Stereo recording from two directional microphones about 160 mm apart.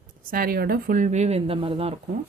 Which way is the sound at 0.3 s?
65° right (ahead or behind).